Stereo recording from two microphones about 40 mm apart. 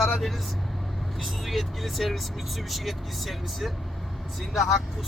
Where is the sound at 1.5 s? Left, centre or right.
Centre.